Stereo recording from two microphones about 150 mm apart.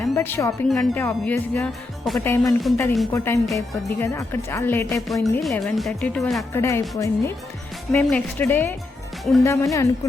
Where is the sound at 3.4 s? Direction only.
Centre (ahead or behind).